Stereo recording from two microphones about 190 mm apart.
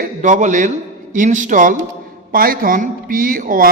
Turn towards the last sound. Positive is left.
turn(degrees=-45)  # may be behind; listen again after turning